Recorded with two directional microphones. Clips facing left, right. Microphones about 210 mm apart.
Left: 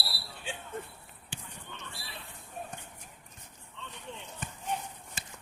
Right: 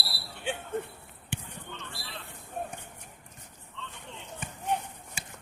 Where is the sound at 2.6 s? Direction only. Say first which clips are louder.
Right 6 dB; 55° right (ahead or behind).